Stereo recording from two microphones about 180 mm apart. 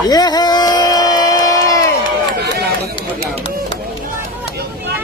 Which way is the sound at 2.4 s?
60° right (ahead or behind).